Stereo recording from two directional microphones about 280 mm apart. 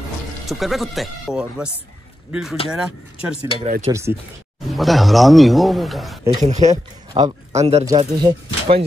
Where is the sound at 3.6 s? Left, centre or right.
Right.